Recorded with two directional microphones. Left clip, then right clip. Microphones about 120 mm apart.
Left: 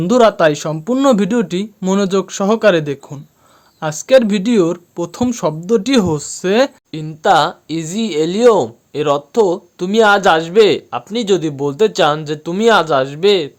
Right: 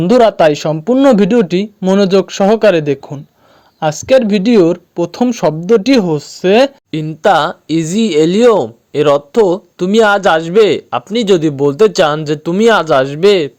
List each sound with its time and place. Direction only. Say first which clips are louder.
0.0 s speech: right 3 dB; 20° right (ahead or behind)
6.9 s speech: even; 45° right (ahead or behind)